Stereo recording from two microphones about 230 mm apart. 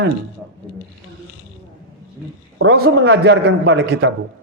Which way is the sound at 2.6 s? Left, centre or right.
Right.